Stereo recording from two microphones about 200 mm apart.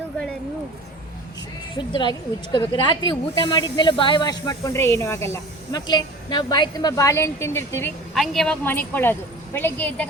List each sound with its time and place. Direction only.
1.7 s a woman's voice: 20° left (ahead or behind)
8.1 s a woman's voice: centre (ahead or behind)